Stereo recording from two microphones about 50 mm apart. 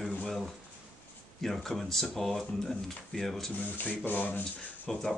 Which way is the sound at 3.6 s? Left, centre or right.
Left.